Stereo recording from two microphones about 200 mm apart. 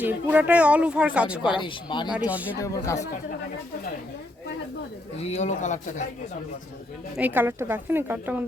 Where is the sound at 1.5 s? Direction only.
25° left (ahead or behind).